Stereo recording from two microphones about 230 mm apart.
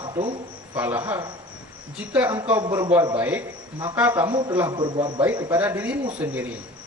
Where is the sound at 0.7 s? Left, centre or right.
Centre.